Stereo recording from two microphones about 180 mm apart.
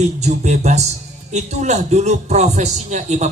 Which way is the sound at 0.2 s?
40° right (ahead or behind).